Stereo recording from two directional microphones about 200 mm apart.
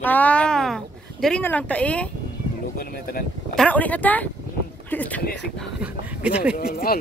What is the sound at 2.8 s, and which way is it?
Speech, 50° left (ahead or behind).